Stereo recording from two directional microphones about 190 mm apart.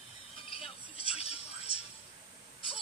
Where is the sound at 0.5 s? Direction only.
30° left (ahead or behind).